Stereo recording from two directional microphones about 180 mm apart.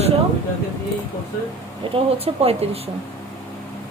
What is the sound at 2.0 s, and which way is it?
Speech, 35° right (ahead or behind).